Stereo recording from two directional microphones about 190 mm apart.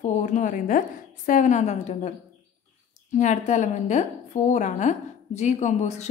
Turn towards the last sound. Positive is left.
turn(degrees=35)  # may be behind; listen again after turning